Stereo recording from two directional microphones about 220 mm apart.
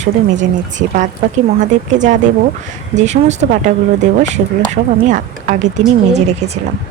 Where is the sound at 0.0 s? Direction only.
35° right (ahead or behind).